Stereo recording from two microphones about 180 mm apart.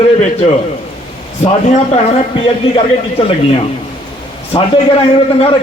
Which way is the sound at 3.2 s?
30° left (ahead or behind).